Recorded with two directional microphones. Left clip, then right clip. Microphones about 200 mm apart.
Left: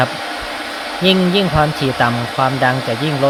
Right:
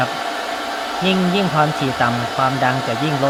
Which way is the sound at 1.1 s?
20° left (ahead or behind).